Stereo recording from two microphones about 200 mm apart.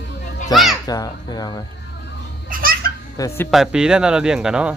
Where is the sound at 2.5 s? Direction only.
45° right (ahead or behind).